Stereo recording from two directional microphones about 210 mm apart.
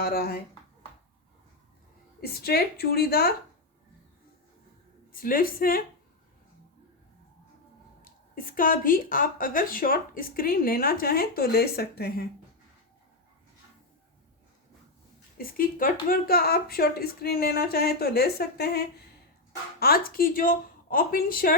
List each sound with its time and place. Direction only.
0.0 s speech: 45° left (ahead or behind)
2.2 s speech: 50° left (ahead or behind)
5.1 s speech: 45° left (ahead or behind)
8.4 s speech: 40° left (ahead or behind)
15.4 s speech: 45° left (ahead or behind)
19.8 s speech: 45° left (ahead or behind)